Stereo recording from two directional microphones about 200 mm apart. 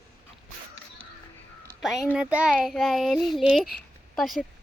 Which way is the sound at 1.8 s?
Centre (ahead or behind).